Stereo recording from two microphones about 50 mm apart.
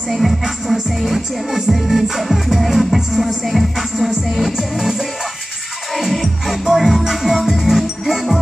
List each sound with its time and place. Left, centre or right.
0.1 s music: centre